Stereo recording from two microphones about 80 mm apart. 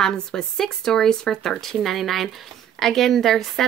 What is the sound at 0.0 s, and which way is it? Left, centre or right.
Speech, centre.